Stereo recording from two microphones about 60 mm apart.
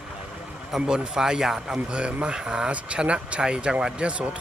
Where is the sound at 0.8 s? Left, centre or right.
Centre.